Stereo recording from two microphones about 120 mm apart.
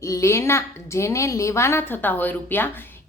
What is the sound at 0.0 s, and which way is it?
A woman's voice, 25° left (ahead or behind).